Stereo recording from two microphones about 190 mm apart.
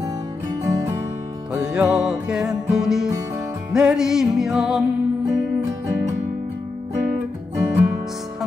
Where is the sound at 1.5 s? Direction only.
5° right (ahead or behind).